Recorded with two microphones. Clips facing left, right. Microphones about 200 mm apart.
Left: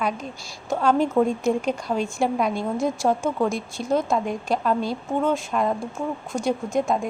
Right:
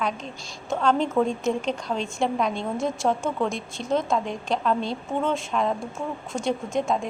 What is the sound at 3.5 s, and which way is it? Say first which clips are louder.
Speech: left 3 dB; 20° right (ahead or behind).